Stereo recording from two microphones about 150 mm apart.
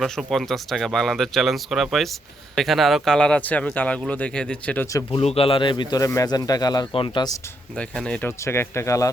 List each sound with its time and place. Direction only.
0.0 s speech: centre (ahead or behind)
5.1 s speech: 40° left (ahead or behind)
7.8 s speech: 5° left (ahead or behind)
8.4 s speech: 15° left (ahead or behind)